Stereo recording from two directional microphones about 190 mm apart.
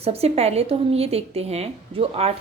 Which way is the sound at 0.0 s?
35° right (ahead or behind).